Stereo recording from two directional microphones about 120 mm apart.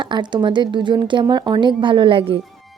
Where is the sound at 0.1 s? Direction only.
40° right (ahead or behind).